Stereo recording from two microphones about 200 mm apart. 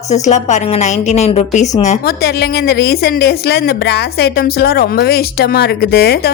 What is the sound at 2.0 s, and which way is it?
A woman's voice, 50° left (ahead or behind).